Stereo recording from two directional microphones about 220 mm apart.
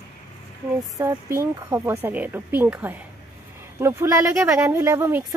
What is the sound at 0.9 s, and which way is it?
Speech, 15° right (ahead or behind).